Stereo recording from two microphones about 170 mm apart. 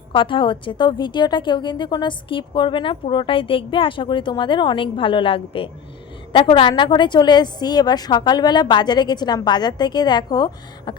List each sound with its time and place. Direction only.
0.1 s a woman's voice: 30° left (ahead or behind)